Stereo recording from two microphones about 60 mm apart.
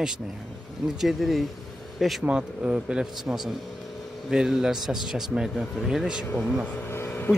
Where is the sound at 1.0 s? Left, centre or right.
Centre.